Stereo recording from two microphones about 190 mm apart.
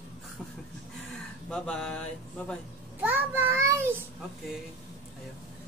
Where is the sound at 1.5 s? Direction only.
5° left (ahead or behind).